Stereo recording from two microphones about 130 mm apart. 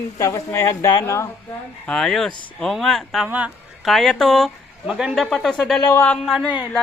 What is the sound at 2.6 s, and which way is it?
Speech, centre (ahead or behind).